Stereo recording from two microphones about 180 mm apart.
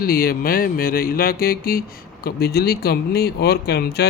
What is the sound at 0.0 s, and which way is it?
Speech, 55° left (ahead or behind).